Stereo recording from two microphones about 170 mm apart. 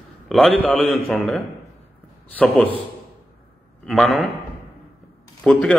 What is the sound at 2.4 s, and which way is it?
Speech, 10° left (ahead or behind).